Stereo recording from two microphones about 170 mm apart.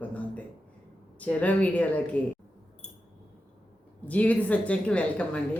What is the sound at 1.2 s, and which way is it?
A woman's voice, 10° left (ahead or behind).